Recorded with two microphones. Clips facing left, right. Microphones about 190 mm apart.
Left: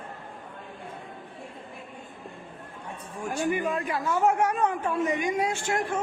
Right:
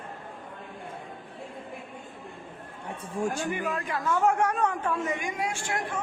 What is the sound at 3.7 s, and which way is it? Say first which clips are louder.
A man's voice: left 1 dB; 15° left (ahead or behind).